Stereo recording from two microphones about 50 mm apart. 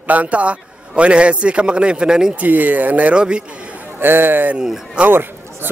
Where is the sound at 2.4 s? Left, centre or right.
Right.